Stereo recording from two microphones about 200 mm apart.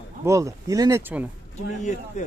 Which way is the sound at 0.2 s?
15° right (ahead or behind).